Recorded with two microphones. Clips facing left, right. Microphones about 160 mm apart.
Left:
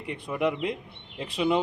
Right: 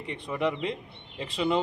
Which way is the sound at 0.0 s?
5° left (ahead or behind).